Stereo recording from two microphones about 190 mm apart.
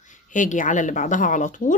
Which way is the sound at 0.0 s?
40° left (ahead or behind).